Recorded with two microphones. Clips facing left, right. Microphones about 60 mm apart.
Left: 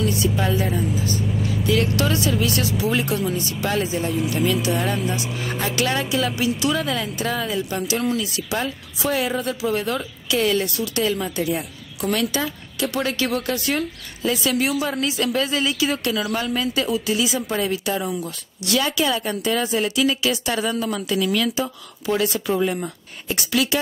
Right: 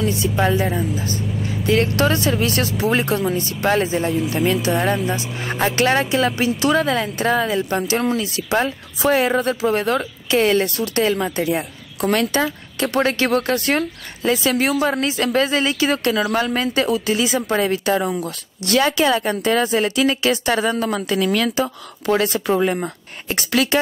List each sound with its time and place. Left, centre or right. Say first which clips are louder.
1.7 s a woman's voice: right 4 dB; right
14.3 s speech: right 4 dB; right
14.6 s a woman's voice: right 4 dB; right